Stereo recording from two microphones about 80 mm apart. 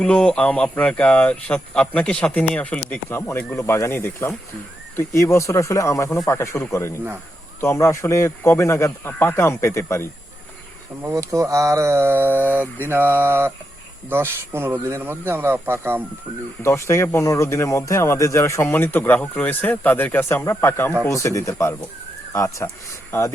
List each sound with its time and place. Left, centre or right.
0.0 s speech: centre
3.1 s speech: left
11.1 s speech: right
12.8 s mantra: right
14.1 s speech: right
16.6 s speech: left
18.7 s speech: left